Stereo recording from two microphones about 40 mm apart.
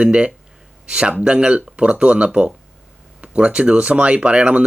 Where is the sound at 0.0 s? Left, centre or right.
Right.